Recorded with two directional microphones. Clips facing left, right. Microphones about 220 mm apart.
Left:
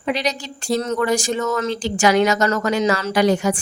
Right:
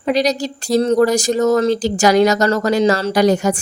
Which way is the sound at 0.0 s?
40° right (ahead or behind).